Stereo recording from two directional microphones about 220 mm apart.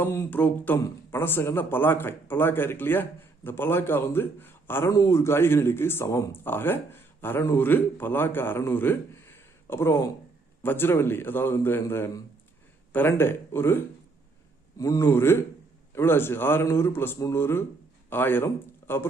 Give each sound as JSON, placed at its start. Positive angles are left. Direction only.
{"t": 0.0, "sound": "speech", "side_deg": 10}